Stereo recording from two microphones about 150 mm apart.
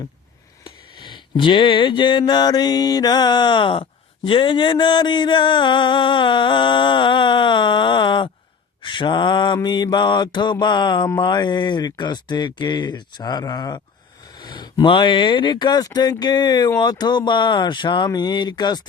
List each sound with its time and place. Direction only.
0.6 s mantra: 30° left (ahead or behind)